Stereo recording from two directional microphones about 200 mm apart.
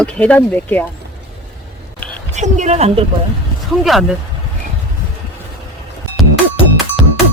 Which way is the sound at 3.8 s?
Centre (ahead or behind).